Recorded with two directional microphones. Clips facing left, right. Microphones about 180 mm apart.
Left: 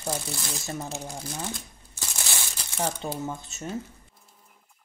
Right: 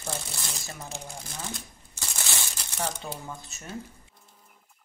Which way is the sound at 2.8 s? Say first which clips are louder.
Left 4 dB; 25° left (ahead or behind).